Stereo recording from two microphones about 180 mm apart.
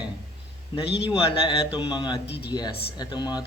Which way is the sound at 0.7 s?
30° left (ahead or behind).